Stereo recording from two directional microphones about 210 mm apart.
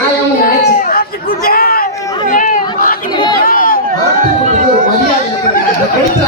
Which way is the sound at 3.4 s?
40° left (ahead or behind).